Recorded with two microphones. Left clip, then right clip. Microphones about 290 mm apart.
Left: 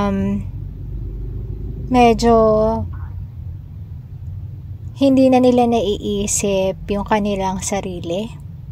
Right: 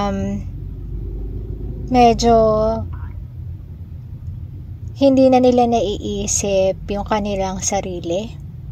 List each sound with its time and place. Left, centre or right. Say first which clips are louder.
1.9 s a woman's voice: even; left
4.9 s a woman's voice: right 1 dB; left